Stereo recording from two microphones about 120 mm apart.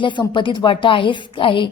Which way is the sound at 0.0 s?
40° left (ahead or behind).